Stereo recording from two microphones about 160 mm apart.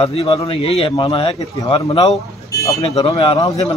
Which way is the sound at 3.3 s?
20° left (ahead or behind).